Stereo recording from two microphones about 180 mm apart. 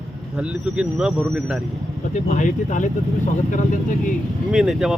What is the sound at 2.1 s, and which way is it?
Speech, 45° left (ahead or behind).